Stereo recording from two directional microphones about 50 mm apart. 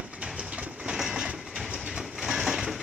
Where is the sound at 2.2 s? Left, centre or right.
Centre.